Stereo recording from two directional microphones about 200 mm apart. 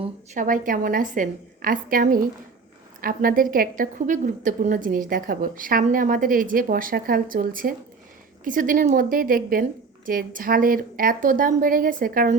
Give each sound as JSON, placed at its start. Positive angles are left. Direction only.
{"t": 0.3, "sound": "a woman's voice", "side_deg": -40}